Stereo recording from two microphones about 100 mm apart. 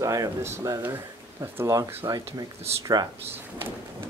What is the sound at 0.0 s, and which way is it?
Speech, 35° right (ahead or behind).